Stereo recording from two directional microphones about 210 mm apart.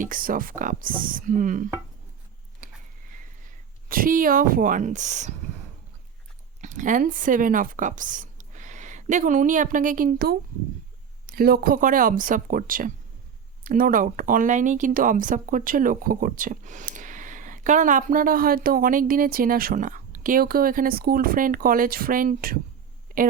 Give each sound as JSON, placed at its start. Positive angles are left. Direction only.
{"t": 0.0, "sound": "speech", "side_deg": -40}
{"t": 2.6, "sound": "a sound", "side_deg": -40}
{"t": 3.1, "sound": "speech", "side_deg": -40}
{"t": 6.6, "sound": "speech", "side_deg": -35}